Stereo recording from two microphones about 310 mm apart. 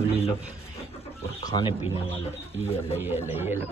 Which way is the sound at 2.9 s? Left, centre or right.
Centre.